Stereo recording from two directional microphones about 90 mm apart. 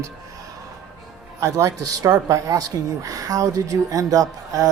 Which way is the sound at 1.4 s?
40° right (ahead or behind).